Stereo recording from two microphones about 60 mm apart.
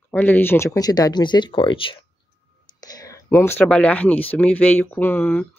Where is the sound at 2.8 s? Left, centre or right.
Left.